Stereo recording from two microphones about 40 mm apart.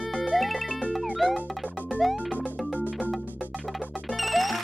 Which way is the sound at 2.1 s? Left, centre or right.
Right.